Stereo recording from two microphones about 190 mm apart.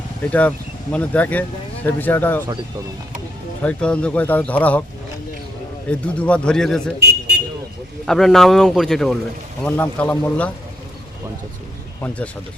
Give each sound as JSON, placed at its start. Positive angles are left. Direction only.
{"t": 0.3, "sound": "speech", "side_deg": 10}
{"t": 3.6, "sound": "speech", "side_deg": 5}
{"t": 5.9, "sound": "speech", "side_deg": 5}
{"t": 7.0, "sound": "vehicle", "side_deg": -60}
{"t": 8.0, "sound": "speech", "side_deg": 0}
{"t": 12.0, "sound": "speech", "side_deg": 5}